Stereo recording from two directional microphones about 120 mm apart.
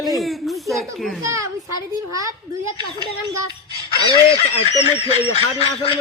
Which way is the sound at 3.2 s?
30° right (ahead or behind).